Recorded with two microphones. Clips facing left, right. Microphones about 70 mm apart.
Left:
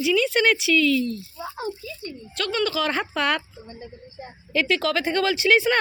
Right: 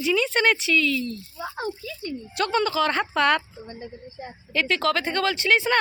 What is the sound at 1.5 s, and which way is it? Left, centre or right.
Rattle, right.